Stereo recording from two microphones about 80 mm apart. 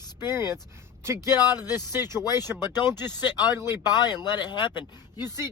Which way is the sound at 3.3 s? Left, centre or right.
Left.